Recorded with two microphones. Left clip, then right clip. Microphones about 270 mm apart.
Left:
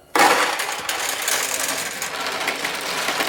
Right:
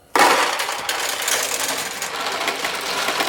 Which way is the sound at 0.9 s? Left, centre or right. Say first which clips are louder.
Right 1 dB; centre.